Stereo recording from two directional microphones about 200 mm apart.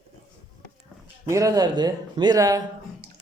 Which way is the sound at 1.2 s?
15° right (ahead or behind).